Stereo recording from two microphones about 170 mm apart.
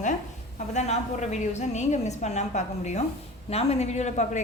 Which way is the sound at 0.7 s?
40° left (ahead or behind).